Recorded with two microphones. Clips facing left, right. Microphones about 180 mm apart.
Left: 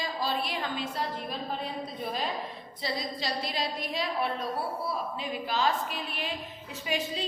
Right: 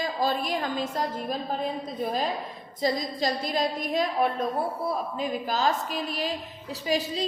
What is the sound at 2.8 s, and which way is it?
A woman's voice, 45° right (ahead or behind).